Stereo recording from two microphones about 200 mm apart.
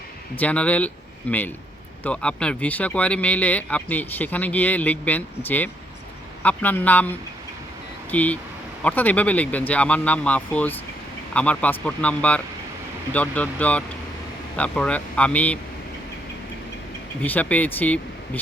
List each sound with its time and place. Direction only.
0.3 s speech: 5° left (ahead or behind)
17.2 s speech: 10° left (ahead or behind)